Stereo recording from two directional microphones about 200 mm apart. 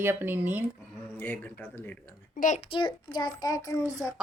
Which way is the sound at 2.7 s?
25° left (ahead or behind).